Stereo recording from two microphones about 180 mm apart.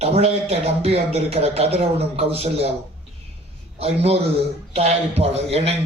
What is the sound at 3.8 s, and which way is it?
A man's voice, 35° right (ahead or behind).